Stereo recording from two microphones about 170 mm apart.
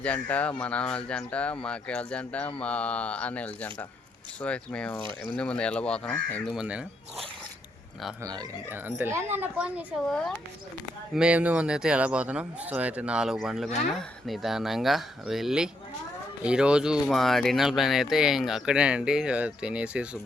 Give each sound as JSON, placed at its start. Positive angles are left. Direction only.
{"t": 0.0, "sound": "speech", "side_deg": 10}
{"t": 8.2, "sound": "speech", "side_deg": -25}